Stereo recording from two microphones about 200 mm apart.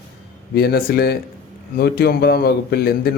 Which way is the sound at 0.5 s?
50° left (ahead or behind).